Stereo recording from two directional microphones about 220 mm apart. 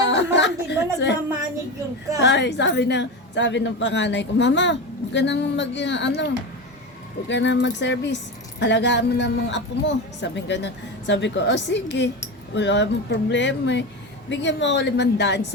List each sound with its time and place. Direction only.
0.0 s chatter: 55° left (ahead or behind)
0.9 s speech: 50° left (ahead or behind)
2.2 s speech: 55° left (ahead or behind)
7.3 s speech: 55° left (ahead or behind)